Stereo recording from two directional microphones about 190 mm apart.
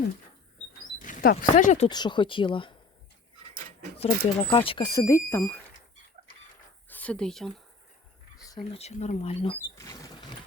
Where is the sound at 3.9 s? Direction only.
30° left (ahead or behind).